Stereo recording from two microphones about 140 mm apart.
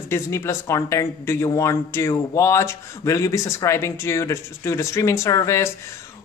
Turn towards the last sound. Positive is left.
turn(degrees=20)  # may be behind; listen again after turning